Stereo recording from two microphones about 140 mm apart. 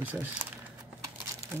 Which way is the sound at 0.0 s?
10° right (ahead or behind).